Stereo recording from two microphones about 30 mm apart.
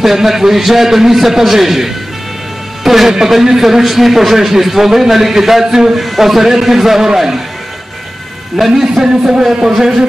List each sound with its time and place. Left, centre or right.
0.0 s a man's voice: centre
6.0 s a man's voice: centre
8.5 s a man's voice: centre
8.8 s a man's voice: right